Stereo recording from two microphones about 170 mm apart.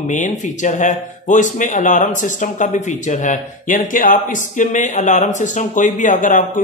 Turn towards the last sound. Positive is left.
turn(degrees=50)  # may be behind; listen again after turning